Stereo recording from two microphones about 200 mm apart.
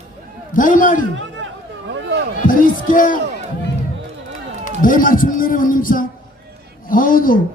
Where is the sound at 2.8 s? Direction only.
40° left (ahead or behind).